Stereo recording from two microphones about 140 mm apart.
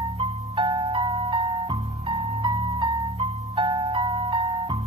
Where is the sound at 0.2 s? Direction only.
35° right (ahead or behind).